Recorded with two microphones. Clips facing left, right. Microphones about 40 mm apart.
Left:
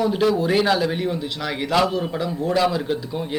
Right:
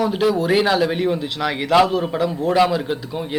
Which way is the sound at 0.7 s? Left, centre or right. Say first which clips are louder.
Right 4 dB; centre.